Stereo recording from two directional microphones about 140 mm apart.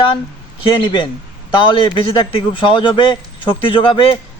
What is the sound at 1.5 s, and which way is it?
A man's voice, 35° left (ahead or behind).